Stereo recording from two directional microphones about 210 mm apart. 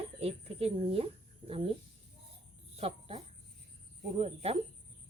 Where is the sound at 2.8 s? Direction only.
30° right (ahead or behind).